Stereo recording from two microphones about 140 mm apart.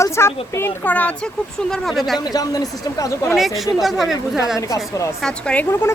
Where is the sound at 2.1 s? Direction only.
30° left (ahead or behind).